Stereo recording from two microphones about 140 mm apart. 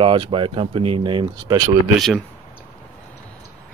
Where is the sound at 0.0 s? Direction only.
40° right (ahead or behind).